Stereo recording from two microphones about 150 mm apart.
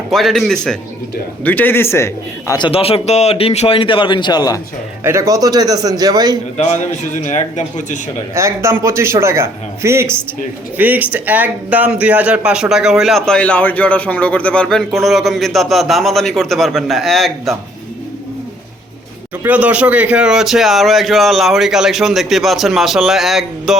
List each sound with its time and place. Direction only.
0.1 s speech: centre (ahead or behind); by 2.6 s 15° left (ahead or behind)
2.6 s a man's voice: 35° left (ahead or behind)
5.0 s speech: 20° right (ahead or behind)
7.2 s speech: 55° left (ahead or behind)
8.4 s a man's voice: 20° right (ahead or behind); by 17.6 s centre (ahead or behind)
19.4 s speech: 10° right (ahead or behind)